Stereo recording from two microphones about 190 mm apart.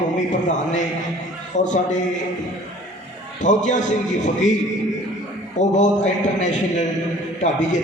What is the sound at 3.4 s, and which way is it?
A man's voice, 40° left (ahead or behind).